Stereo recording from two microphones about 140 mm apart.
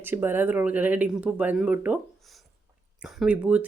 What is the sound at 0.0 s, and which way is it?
Speech, 15° right (ahead or behind).